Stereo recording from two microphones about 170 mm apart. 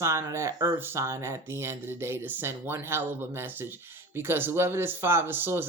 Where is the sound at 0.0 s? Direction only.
15° right (ahead or behind).